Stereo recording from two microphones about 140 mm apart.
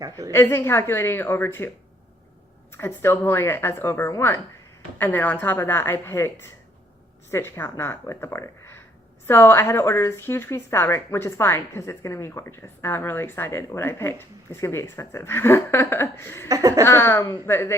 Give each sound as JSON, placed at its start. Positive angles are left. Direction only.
{"t": 0.3, "sound": "a woman's voice", "side_deg": 15}
{"t": 2.7, "sound": "a woman's voice", "side_deg": 20}
{"t": 16.5, "sound": "laughter", "side_deg": -25}
{"t": 16.8, "sound": "a woman's voice", "side_deg": 20}